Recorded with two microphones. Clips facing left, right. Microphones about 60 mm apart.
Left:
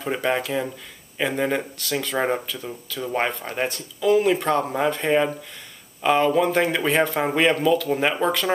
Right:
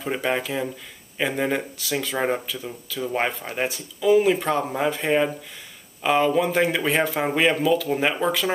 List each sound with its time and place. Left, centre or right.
0.0 s speech: centre